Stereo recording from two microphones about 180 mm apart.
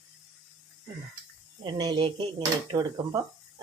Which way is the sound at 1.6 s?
25° right (ahead or behind).